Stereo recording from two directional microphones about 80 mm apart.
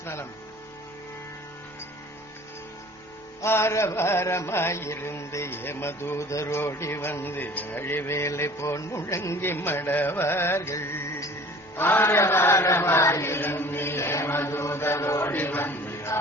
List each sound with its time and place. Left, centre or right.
0.0 s speech: left
3.4 s mantra: left
11.8 s chant: left